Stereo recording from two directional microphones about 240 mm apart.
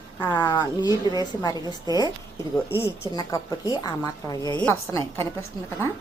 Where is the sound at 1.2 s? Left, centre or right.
Centre.